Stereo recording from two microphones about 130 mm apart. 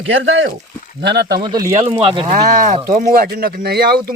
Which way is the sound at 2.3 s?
85° right.